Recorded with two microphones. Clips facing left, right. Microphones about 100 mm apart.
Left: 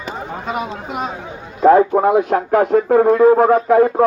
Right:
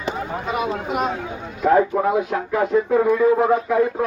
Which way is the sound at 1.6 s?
50° left (ahead or behind).